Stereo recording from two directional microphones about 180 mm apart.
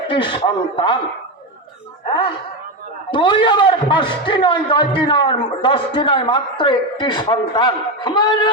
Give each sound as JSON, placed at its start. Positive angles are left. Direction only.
{"t": 0.1, "sound": "a man's voice", "side_deg": 30}
{"t": 2.0, "sound": "a man's voice", "side_deg": 30}